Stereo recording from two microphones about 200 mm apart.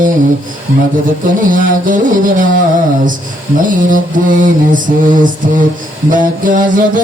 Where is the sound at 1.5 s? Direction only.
40° right (ahead or behind).